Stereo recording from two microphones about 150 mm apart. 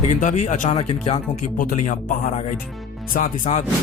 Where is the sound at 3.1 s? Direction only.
60° left (ahead or behind).